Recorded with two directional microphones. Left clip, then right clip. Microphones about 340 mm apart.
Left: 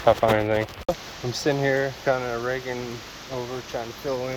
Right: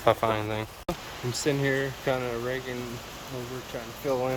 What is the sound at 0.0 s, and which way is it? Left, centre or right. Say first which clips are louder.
Speech: left 5 dB; centre.